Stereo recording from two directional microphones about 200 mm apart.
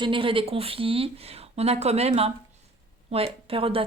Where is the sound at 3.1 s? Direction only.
30° right (ahead or behind).